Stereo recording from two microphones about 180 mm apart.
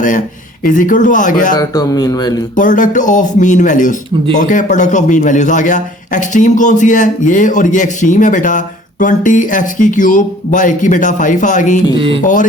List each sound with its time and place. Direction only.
0.6 s a man's voice: 45° left (ahead or behind)
1.5 s speech: 20° left (ahead or behind)
2.6 s a man's voice: 45° left (ahead or behind)
11.9 s speech: 30° right (ahead or behind)
12.2 s a man's voice: 45° left (ahead or behind)